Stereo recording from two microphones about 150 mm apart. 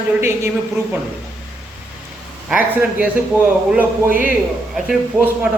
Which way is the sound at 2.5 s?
10° right (ahead or behind).